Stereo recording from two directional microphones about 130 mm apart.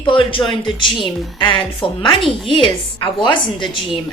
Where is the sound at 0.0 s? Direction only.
40° left (ahead or behind).